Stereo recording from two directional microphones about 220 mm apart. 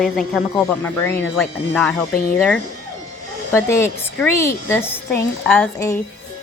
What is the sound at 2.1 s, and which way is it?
Speech, 40° left (ahead or behind).